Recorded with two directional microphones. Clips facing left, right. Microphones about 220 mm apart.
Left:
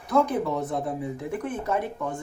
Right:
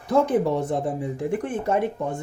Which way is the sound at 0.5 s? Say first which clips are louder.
Right 4 dB; 30° right (ahead or behind).